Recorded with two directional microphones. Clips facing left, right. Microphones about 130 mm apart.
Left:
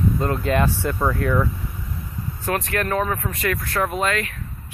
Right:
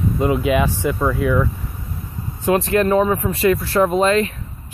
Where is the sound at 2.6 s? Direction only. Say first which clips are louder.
Right 7 dB; 25° right (ahead or behind).